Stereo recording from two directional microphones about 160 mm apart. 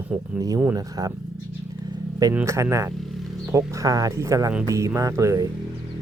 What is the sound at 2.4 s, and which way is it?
Speech, 20° right (ahead or behind).